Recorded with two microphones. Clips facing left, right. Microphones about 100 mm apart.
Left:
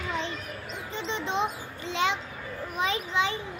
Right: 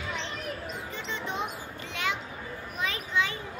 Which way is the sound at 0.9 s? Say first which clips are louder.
Left 6 dB; 20° left (ahead or behind).